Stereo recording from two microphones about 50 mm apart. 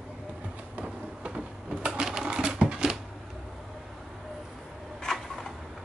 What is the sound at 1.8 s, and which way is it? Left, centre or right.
Sewing machine, centre.